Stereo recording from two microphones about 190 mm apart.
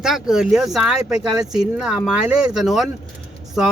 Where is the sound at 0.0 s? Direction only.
Centre (ahead or behind).